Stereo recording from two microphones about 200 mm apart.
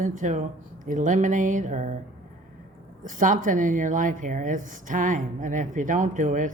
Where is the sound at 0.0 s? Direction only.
40° right (ahead or behind).